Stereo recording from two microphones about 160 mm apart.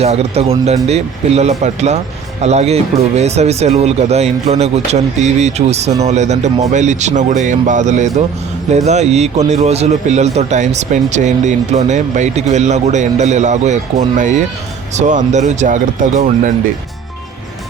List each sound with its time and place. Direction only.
0.0 s a man's voice: 40° right (ahead or behind)